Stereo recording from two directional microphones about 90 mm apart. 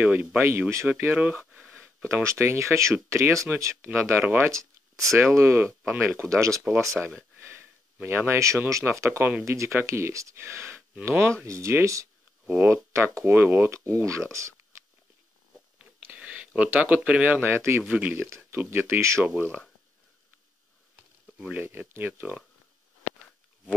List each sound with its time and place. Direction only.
0.0 s speech: 20° right (ahead or behind)
0.4 s speech: 30° right (ahead or behind)
1.2 s speech: 15° right (ahead or behind)
2.2 s speech: 30° right (ahead or behind)
4.4 s a sound: 35° right (ahead or behind)
5.1 s speech: 30° right (ahead or behind)
7.3 s sniff: 25° right (ahead or behind)
8.6 s speech: 35° right (ahead or behind)
12.4 s speech: 25° right (ahead or behind)
16.2 s speech: 10° right (ahead or behind); by 17.8 s 30° right (ahead or behind)
17.8 s speech: 15° right (ahead or behind)
18.3 s speech: 25° right (ahead or behind)
19.2 s speech: 20° right (ahead or behind)
21.4 s speech: 15° right (ahead or behind)